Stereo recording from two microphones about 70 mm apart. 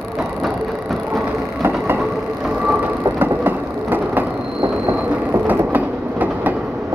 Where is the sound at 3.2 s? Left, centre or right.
Right.